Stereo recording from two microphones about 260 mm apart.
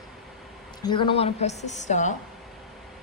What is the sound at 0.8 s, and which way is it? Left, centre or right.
A woman's voice, centre.